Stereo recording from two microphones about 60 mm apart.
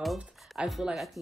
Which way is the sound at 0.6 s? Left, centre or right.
Centre.